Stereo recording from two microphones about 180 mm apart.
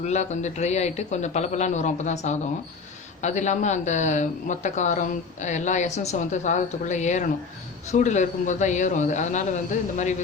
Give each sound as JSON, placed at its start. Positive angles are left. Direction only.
{"t": 0.0, "sound": "speech", "side_deg": 40}